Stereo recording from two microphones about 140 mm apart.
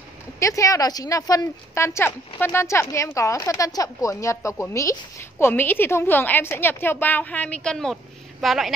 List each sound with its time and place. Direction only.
0.4 s a woman's voice: 25° left (ahead or behind); by 8.7 s centre (ahead or behind)